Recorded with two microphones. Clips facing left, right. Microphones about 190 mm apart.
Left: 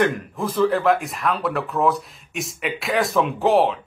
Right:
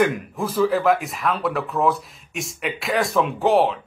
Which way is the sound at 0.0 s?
10° right (ahead or behind).